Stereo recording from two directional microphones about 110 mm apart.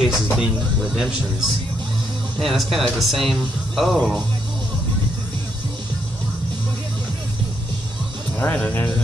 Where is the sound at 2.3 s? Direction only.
Centre (ahead or behind).